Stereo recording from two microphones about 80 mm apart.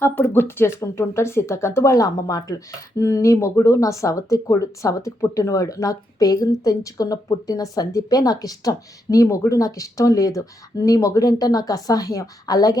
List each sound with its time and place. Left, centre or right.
0.0 s speech: left